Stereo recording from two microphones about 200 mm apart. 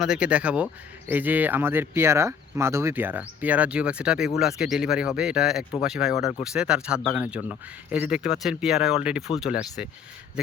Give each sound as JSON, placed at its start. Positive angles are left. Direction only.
{"t": 0.0, "sound": "speech", "side_deg": -5}